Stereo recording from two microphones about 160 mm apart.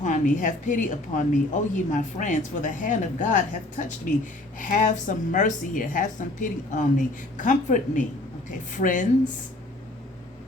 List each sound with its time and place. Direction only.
0.0 s speech: 50° left (ahead or behind)